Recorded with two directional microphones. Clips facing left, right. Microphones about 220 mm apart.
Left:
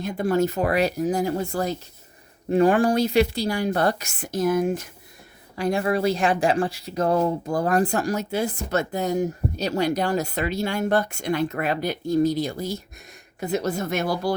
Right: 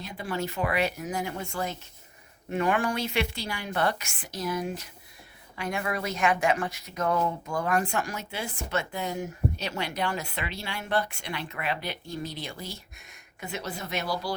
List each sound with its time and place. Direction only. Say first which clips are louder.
0.0 s speech: left 11 dB; 50° left (ahead or behind)
5.5 s speech: left 9 dB; 35° left (ahead or behind); by 14.3 s 50° left (ahead or behind)